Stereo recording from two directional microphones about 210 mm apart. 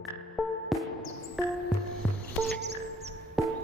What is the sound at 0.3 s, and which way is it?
Music, centre (ahead or behind).